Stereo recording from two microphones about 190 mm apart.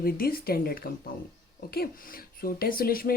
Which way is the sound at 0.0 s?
50° left (ahead or behind).